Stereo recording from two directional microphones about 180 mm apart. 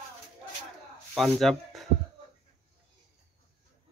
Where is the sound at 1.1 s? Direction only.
Centre (ahead or behind).